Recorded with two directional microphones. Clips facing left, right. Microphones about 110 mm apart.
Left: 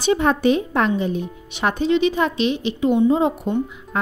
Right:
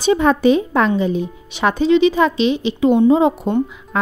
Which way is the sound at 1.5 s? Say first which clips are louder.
Right 5 dB; 90° right.